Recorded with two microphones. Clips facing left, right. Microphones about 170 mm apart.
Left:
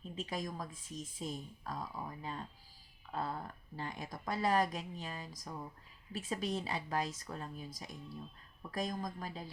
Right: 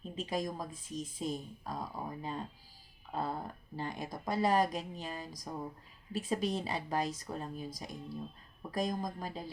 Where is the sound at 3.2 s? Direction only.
30° right (ahead or behind).